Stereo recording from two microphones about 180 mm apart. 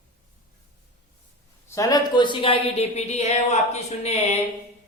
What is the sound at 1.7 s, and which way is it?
A woman's voice, 20° left (ahead or behind).